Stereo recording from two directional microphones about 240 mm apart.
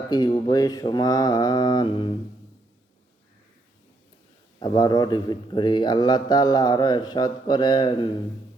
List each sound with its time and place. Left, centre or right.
0.1 s a man's voice: centre
4.6 s a man's voice: centre